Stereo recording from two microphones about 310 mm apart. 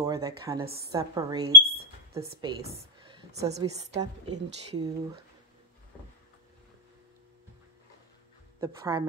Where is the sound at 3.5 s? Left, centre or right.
Right.